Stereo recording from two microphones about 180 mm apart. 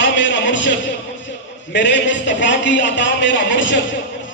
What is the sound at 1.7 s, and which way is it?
A man's voice, 90° left.